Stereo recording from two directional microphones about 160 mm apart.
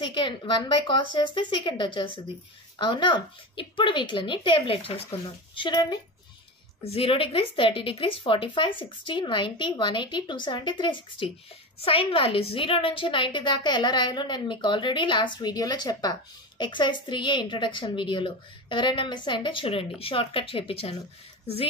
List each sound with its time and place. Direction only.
0.0 s a woman's voice: 30° left (ahead or behind)
6.8 s a woman's voice: 40° left (ahead or behind)